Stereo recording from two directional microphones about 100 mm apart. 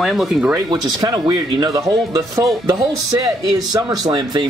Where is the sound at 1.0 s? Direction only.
40° right (ahead or behind).